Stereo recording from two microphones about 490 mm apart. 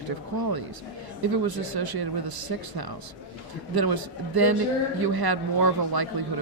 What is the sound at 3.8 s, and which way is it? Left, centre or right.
Speech, right.